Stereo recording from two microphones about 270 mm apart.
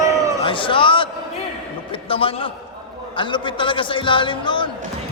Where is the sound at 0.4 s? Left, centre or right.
Centre.